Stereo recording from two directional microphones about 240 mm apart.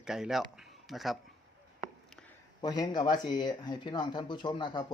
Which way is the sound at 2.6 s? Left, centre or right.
Centre.